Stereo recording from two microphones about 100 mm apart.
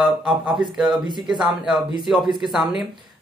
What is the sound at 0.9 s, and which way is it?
Speech, 50° right (ahead or behind).